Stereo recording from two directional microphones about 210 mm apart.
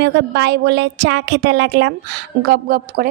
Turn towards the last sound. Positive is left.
turn(degrees=-45)  # may be behind; listen again after turning